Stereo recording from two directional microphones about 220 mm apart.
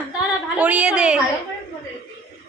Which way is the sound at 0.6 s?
5° right (ahead or behind).